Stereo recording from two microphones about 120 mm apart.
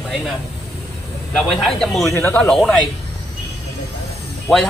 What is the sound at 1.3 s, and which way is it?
Speech, 5° left (ahead or behind).